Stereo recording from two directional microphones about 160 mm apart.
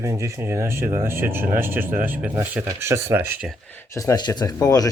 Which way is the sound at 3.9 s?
25° left (ahead or behind).